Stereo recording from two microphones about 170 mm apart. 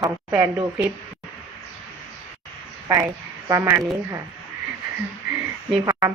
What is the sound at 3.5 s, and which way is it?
Speech, 15° right (ahead or behind).